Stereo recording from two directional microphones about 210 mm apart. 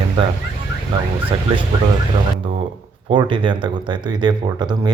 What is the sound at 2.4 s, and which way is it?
Speech, 30° right (ahead or behind).